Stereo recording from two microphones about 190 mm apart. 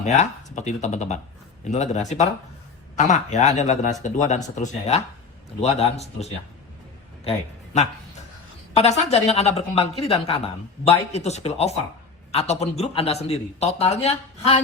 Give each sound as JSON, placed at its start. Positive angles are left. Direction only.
{"t": 0.0, "sound": "a man's voice", "side_deg": 40}